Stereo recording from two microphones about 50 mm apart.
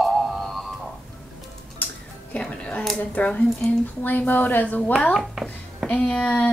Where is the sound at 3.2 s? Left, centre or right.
Left.